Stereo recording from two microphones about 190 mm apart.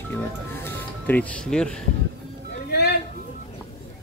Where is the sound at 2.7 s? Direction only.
60° left (ahead or behind).